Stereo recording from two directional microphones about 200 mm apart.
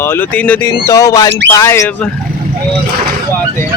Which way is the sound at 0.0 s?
10° left (ahead or behind).